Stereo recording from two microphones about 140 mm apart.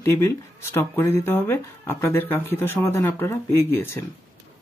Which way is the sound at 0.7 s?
15° left (ahead or behind).